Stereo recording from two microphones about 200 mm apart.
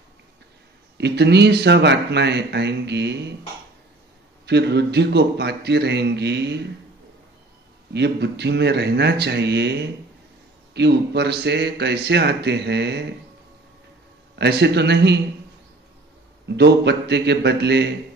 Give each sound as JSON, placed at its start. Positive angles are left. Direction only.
{"t": 0.9, "sound": "speech", "side_deg": -55}
{"t": 4.5, "sound": "speech", "side_deg": -55}
{"t": 7.9, "sound": "speech", "side_deg": -55}
{"t": 14.3, "sound": "speech", "side_deg": -55}
{"t": 16.4, "sound": "speech", "side_deg": -60}